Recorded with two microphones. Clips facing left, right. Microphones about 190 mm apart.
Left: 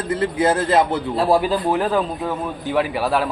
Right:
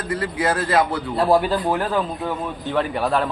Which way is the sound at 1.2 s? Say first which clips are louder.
Even; 5° left (ahead or behind).